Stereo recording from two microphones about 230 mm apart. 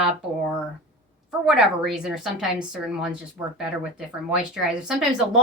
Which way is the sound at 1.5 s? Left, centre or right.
Centre.